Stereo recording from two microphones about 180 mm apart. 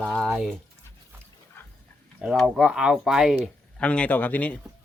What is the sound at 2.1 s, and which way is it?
Speech, 5° right (ahead or behind).